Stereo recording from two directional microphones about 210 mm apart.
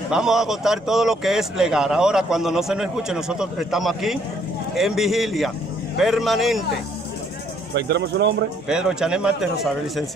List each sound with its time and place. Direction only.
0.1 s speech: centre (ahead or behind)
7.7 s speech: 55° right (ahead or behind)
8.6 s speech: 5° right (ahead or behind)